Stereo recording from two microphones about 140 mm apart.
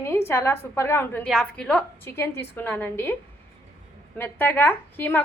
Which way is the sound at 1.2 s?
Centre (ahead or behind).